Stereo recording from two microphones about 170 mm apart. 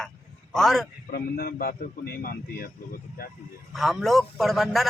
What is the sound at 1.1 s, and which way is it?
A man's voice, 60° left (ahead or behind).